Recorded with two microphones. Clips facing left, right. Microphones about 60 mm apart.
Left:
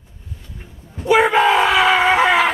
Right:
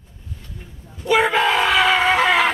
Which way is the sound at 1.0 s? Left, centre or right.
Centre.